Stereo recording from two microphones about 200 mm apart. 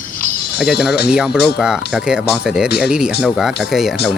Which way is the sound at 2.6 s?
55° left (ahead or behind).